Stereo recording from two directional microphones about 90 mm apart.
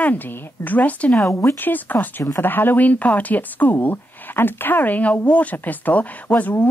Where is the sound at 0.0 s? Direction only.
20° left (ahead or behind).